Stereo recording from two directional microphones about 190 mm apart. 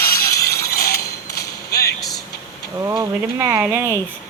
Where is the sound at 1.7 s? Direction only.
55° left (ahead or behind).